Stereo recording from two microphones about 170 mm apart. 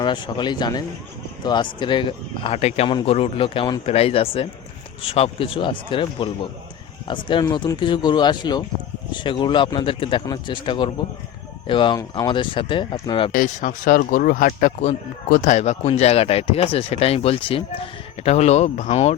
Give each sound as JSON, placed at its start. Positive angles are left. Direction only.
{"t": 0.0, "sound": "a man's voice", "side_deg": 25}
{"t": 13.3, "sound": "speech", "side_deg": 50}
{"t": 14.8, "sound": "a man's voice", "side_deg": 45}